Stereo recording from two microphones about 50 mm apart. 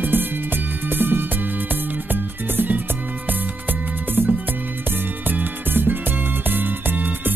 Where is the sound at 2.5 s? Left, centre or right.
Right.